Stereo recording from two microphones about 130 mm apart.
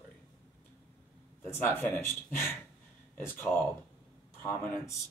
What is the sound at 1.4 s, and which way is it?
Speech, 15° left (ahead or behind).